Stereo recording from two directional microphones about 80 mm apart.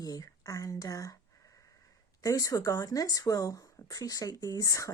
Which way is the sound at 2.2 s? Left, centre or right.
Left.